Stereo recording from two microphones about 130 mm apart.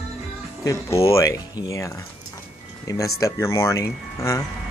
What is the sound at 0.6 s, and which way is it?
Speech, 25° left (ahead or behind).